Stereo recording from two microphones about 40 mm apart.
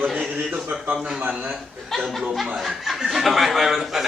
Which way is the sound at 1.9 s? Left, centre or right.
Centre.